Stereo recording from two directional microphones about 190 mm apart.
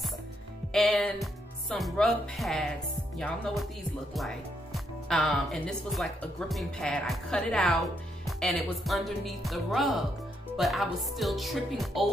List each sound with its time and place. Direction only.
0.7 s speech: centre (ahead or behind)